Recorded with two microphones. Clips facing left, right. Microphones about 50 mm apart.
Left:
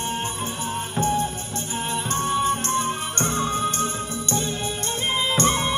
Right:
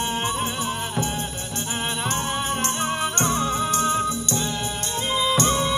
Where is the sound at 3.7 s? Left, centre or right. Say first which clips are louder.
Right 5 dB; left.